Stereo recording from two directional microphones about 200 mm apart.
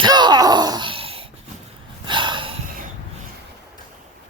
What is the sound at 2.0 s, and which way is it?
Gasp, 25° right (ahead or behind).